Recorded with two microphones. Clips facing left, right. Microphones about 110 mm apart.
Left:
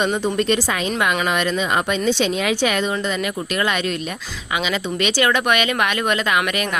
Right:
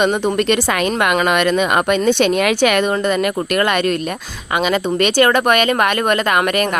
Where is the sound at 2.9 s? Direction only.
55° right (ahead or behind).